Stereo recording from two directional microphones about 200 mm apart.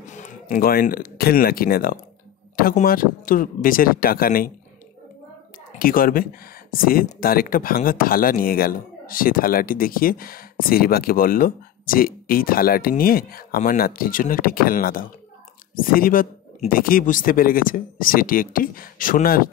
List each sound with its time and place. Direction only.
0.0 s speech: 40° left (ahead or behind)
5.8 s speech: 45° left (ahead or behind)